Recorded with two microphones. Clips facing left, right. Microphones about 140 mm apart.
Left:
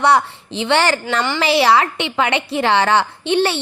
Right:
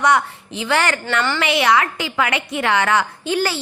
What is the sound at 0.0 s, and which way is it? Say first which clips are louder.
A woman's voice: left 2 dB; 30° left (ahead or behind).